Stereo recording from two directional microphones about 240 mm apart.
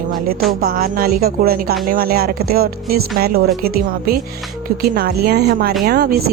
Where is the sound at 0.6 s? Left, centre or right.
Right.